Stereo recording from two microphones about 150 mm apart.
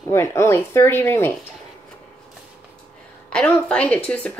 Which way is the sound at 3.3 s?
5° left (ahead or behind).